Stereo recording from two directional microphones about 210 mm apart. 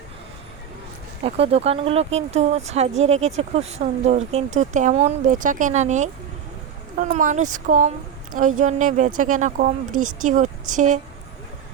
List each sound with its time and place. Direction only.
1.2 s speech: 30° right (ahead or behind)